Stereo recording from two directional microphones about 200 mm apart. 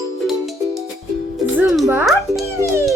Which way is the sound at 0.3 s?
Centre (ahead or behind).